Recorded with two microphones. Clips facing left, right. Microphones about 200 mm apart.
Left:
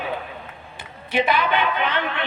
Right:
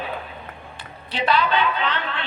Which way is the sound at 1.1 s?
10° left (ahead or behind).